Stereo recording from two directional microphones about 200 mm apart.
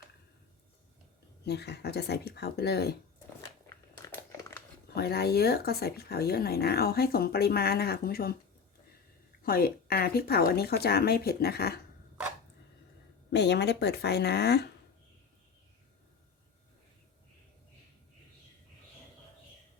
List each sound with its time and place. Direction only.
1.5 s speech: 55° left (ahead or behind)
3.4 s crumpling: 15° left (ahead or behind)
4.9 s speech: 50° left (ahead or behind)
9.4 s speech: 50° left (ahead or behind)
13.3 s speech: 60° left (ahead or behind)